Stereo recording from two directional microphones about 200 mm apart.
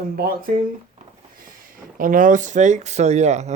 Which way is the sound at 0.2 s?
45° right (ahead or behind).